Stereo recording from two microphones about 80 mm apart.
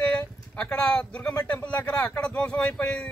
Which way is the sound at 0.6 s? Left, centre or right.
Centre.